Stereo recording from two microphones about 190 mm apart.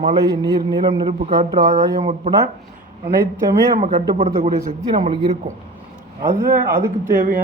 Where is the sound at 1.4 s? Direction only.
35° right (ahead or behind).